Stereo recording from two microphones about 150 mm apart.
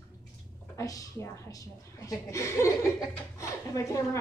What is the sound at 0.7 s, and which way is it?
A woman's voice, 20° left (ahead or behind).